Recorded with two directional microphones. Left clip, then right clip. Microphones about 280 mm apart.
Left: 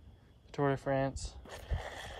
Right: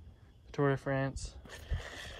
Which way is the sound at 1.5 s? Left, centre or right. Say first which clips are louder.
Left 3 dB; centre.